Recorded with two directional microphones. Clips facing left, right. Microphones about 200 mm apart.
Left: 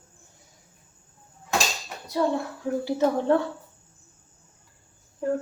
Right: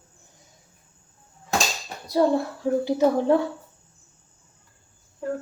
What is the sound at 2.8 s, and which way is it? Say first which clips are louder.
Speech: right 2 dB; 10° right (ahead or behind).